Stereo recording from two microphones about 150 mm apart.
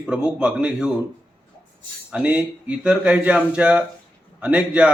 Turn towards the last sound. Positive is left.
turn(degrees=-10)  # may be behind; listen again after turning